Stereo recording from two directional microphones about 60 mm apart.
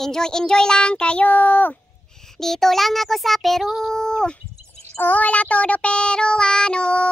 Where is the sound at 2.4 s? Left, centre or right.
Centre.